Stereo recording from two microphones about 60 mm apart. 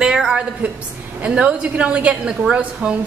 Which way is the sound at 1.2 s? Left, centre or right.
Centre.